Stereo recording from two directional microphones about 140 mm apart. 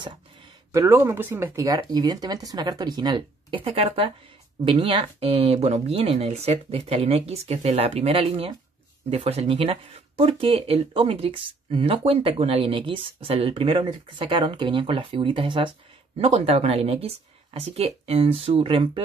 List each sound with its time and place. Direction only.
0.7 s speech: 20° right (ahead or behind); by 15.7 s 35° right (ahead or behind)
16.2 s speech: 50° right (ahead or behind)